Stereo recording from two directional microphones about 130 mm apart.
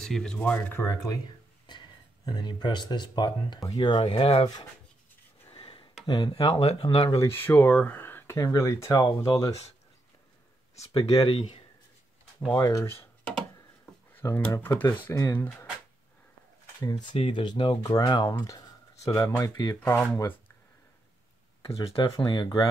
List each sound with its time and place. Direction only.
0.0 s speech: 5° left (ahead or behind); by 1.1 s 20° left (ahead or behind)
1.7 s speech: 35° left (ahead or behind)
4.0 s speech: 45° left (ahead or behind)
5.5 s a sound: 40° left (ahead or behind)
6.0 s speech: 35° left (ahead or behind)
6.6 s speech: 50° left (ahead or behind)
7.0 s speech: 30° left (ahead or behind)
7.3 s speech: 15° left (ahead or behind)
11.0 s speech: 50° left (ahead or behind)
12.5 s speech: 25° left (ahead or behind)
16.8 s speech: 35° left (ahead or behind)
19.8 s speech: 15° left (ahead or behind)
22.2 s speech: 40° left (ahead or behind)